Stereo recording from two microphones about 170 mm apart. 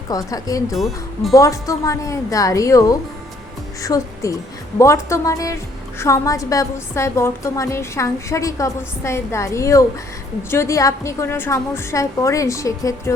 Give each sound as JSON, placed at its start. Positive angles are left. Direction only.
{"t": 0.1, "sound": "a woman's voice", "side_deg": 20}
{"t": 0.8, "sound": "speech", "side_deg": 0}
{"t": 1.3, "sound": "a woman's voice", "side_deg": 20}